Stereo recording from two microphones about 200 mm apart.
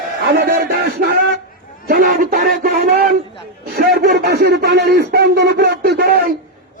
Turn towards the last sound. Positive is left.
turn(degrees=-55)  # may be behind; listen again after turning